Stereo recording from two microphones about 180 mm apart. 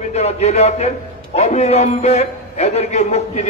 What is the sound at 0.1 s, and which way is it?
A man's voice, 40° left (ahead or behind).